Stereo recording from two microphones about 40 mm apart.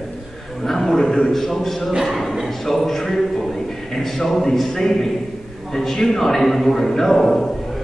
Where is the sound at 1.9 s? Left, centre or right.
Centre.